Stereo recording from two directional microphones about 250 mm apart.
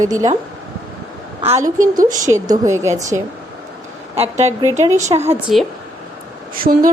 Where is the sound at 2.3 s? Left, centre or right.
Centre.